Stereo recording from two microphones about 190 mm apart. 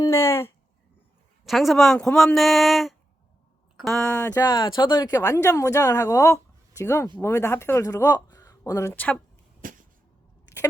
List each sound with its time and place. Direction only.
0.0 s speech: 15° left (ahead or behind)
1.5 s speech: centre (ahead or behind)
9.6 s a sound: 45° right (ahead or behind)